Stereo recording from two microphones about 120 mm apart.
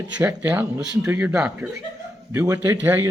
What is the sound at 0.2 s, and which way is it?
Speech, 15° right (ahead or behind).